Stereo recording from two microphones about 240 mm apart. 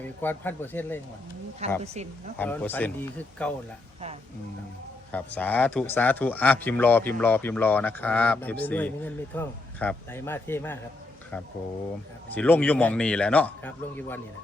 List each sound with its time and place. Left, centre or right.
0.0 s speech: centre
1.8 s speech: right
2.4 s speech: centre
5.1 s speech: centre
12.3 s a man's voice: centre